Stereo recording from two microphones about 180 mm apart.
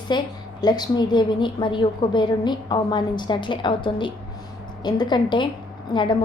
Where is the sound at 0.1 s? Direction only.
25° left (ahead or behind).